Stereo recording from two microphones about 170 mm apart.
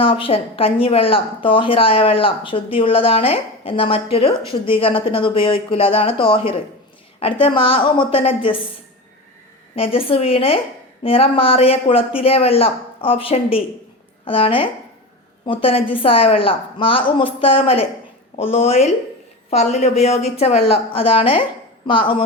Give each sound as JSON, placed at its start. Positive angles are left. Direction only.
{"t": 0.0, "sound": "a woman's voice", "side_deg": 30}
{"t": 9.7, "sound": "a woman's voice", "side_deg": 35}